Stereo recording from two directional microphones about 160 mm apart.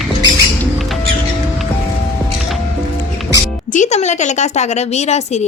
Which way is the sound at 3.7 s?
45° left (ahead or behind).